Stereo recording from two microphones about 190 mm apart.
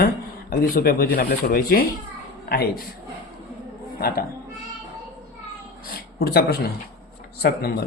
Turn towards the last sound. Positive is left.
turn(degrees=55)  # may be behind; listen again after turning